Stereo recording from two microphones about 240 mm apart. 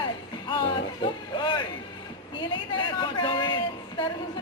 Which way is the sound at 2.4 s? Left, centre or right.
Centre.